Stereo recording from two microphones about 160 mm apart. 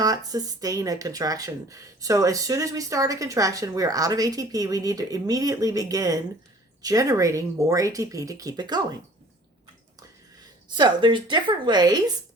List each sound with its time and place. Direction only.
0.0 s speech: 25° right (ahead or behind)
10.8 s speech: 30° right (ahead or behind)